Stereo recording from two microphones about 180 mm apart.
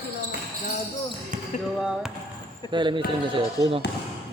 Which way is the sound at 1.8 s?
Centre (ahead or behind).